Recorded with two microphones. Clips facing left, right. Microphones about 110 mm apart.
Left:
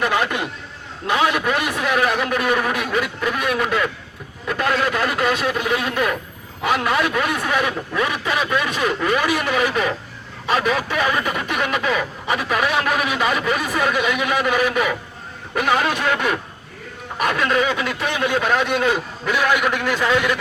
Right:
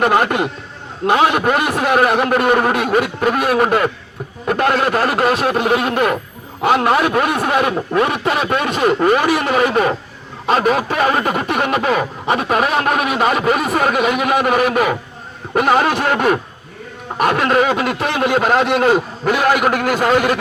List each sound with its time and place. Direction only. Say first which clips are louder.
0.0 s speech: right 6 dB; 50° right (ahead or behind)
1.0 s speech: right 5 dB; 35° right (ahead or behind)
1.9 s speech: right 6 dB; 55° right (ahead or behind)
3.4 s speech: right 6 dB; 35° right (ahead or behind)
3.7 s a man's voice: right 5 dB; 45° right (ahead or behind)
5.5 s speech: right 6 dB; 55° right (ahead or behind)
5.7 s speech: right 5 dB; 35° right (ahead or behind)
16.1 s speech: right 6 dB; 45° right (ahead or behind)
17.4 s speech: right 3 dB; 40° right (ahead or behind)